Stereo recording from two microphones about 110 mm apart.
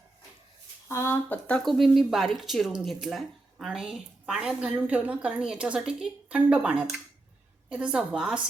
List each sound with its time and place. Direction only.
0.9 s speech: 25° left (ahead or behind)
1.5 s a woman's voice: 5° left (ahead or behind)